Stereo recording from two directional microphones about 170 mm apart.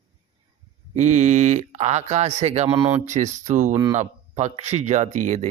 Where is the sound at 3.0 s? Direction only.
45° right (ahead or behind).